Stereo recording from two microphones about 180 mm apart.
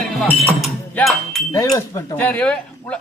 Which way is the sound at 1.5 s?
15° left (ahead or behind).